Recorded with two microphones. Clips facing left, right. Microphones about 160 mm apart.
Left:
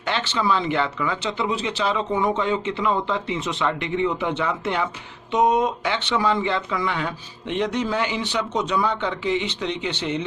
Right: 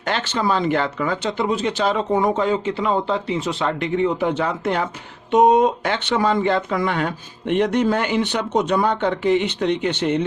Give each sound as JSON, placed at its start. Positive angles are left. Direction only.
{"t": 0.0, "sound": "speech", "side_deg": -45}